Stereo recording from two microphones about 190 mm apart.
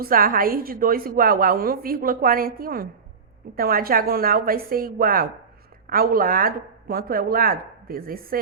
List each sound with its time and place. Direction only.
0.0 s a woman's voice: 50° right (ahead or behind)